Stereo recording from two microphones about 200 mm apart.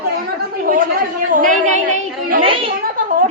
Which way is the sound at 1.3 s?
40° right (ahead or behind).